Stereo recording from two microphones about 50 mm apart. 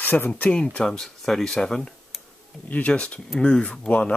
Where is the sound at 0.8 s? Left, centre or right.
Centre.